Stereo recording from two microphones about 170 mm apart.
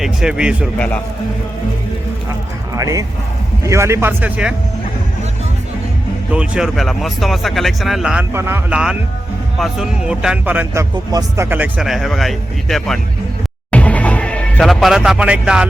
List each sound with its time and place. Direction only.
0.0 s speech: 5° right (ahead or behind)
0.8 s a man's voice: 10° left (ahead or behind)
2.7 s speech: 20° right (ahead or behind)
6.3 s speech: 5° right (ahead or behind)
13.7 s music: 10° left (ahead or behind)